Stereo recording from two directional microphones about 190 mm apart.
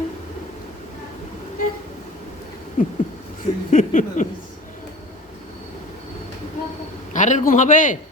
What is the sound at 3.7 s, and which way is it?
Speech, 40° left (ahead or behind).